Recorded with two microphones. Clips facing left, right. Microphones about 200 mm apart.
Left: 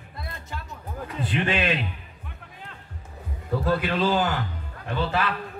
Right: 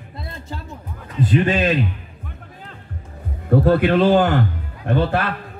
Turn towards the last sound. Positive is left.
turn(degrees=-55)  # may be behind; listen again after turning